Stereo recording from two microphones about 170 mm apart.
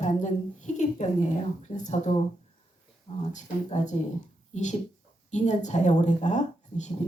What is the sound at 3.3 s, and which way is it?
Speech, 45° left (ahead or behind).